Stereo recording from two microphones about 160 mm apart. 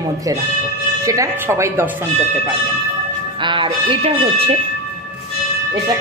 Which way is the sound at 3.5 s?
35° right (ahead or behind).